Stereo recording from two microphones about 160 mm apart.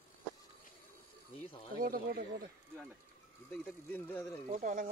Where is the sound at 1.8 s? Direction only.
65° right (ahead or behind).